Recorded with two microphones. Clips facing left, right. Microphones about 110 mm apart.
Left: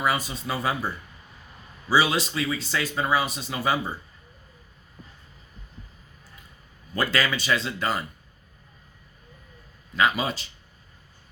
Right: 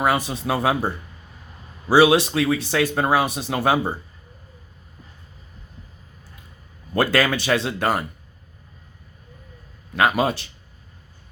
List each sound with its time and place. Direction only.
0.0 s speech: 65° right (ahead or behind)
1.9 s speech: 65° right (ahead or behind)
6.9 s speech: 60° right (ahead or behind)
9.9 s speech: 55° right (ahead or behind)